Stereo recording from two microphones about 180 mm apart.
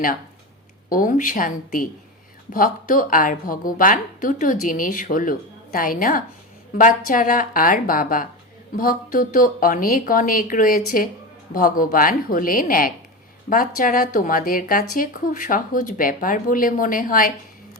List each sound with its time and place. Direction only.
0.9 s a woman's voice: 50° left (ahead or behind)